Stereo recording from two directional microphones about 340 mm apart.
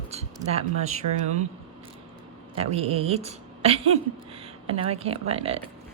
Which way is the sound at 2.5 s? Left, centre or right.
Centre.